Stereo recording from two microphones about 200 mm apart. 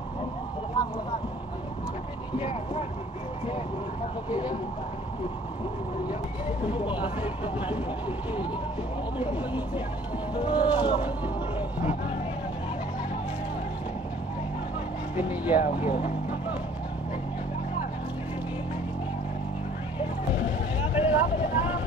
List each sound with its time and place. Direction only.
2.3 s speech: 25° left (ahead or behind)
4.3 s speech: 25° left (ahead or behind)
6.6 s speech: 25° left (ahead or behind)
9.2 s speech: 25° left (ahead or behind)
15.1 s speech: 10° right (ahead or behind)
20.0 s vehicle: 10° right (ahead or behind)